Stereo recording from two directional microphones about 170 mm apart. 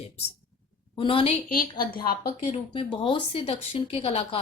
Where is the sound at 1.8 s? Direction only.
60° left (ahead or behind).